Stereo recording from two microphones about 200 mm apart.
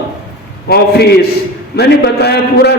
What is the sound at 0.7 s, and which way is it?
A man's voice, 50° left (ahead or behind).